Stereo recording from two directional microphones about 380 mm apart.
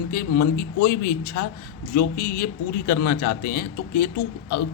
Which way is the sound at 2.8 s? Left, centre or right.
Left.